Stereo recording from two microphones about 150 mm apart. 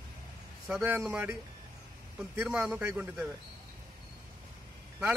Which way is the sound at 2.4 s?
5° right (ahead or behind).